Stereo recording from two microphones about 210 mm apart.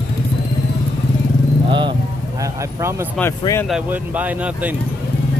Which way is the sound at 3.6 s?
5° right (ahead or behind).